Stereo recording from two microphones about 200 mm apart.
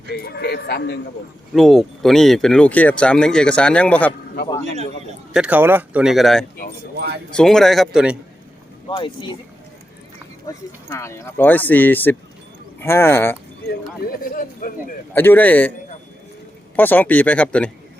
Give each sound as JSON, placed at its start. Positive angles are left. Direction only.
{"t": 0.1, "sound": "speech", "side_deg": 55}
{"t": 1.5, "sound": "speech", "side_deg": 0}
{"t": 4.4, "sound": "speech", "side_deg": 55}
{"t": 5.3, "sound": "speech", "side_deg": -5}
{"t": 8.9, "sound": "speech", "side_deg": 25}
{"t": 10.9, "sound": "speech", "side_deg": 15}
{"t": 14.0, "sound": "speech", "side_deg": 45}
{"t": 15.1, "sound": "speech", "side_deg": 10}
{"t": 16.7, "sound": "speech", "side_deg": 10}